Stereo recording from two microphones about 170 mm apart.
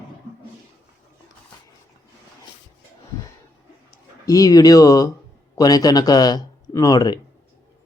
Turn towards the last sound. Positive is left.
turn(degrees=25)  # may be behind; listen again after turning